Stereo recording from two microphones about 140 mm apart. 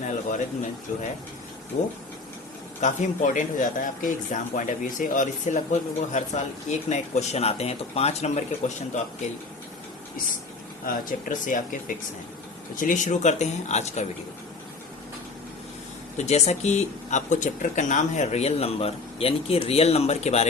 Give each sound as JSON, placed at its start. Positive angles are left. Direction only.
{"t": 0.0, "sound": "a man's voice", "side_deg": 60}
{"t": 2.8, "sound": "a man's voice", "side_deg": 60}
{"t": 10.8, "sound": "a man's voice", "side_deg": 70}
{"t": 16.1, "sound": "speech", "side_deg": 55}